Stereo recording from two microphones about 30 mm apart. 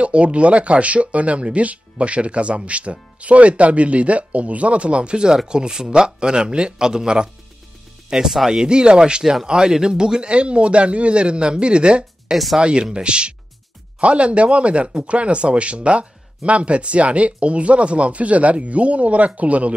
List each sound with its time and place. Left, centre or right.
0.0 s speech: right
8.1 s speech: centre
8.5 s speech: right
10.3 s speech: right
14.0 s speech: right